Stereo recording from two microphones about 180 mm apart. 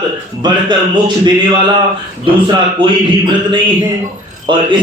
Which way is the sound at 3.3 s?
25° right (ahead or behind).